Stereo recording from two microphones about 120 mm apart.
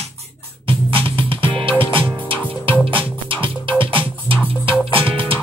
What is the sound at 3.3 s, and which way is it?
Music, 45° right (ahead or behind).